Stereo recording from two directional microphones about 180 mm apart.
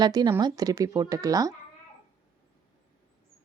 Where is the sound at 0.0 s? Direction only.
25° right (ahead or behind).